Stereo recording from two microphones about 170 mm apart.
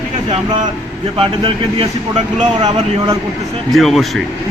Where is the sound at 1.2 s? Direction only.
35° right (ahead or behind).